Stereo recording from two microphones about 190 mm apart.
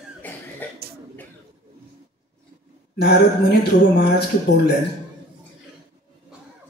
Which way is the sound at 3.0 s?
60° left (ahead or behind).